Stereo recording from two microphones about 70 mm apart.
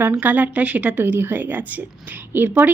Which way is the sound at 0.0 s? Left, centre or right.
Right.